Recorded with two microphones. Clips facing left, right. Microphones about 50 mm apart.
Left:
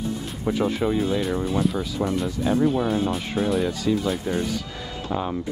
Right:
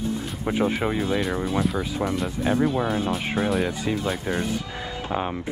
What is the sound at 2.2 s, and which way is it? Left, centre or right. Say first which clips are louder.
Speech: left 1 dB; right.